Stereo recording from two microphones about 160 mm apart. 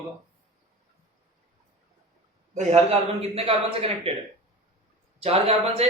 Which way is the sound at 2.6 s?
40° right (ahead or behind).